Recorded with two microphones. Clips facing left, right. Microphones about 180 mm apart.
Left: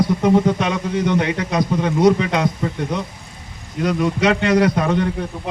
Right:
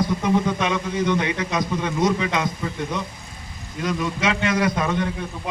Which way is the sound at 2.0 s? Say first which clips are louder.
Left 6 dB; 60° left (ahead or behind).